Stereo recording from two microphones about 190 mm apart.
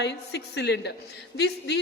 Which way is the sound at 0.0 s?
65° left (ahead or behind).